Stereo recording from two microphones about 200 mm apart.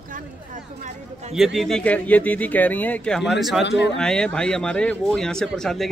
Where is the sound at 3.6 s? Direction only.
65° left (ahead or behind).